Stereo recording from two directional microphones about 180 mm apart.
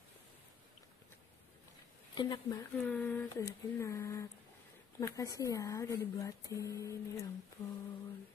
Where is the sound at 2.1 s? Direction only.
25° left (ahead or behind).